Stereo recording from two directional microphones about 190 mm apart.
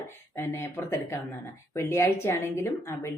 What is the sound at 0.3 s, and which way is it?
Speech, 10° left (ahead or behind).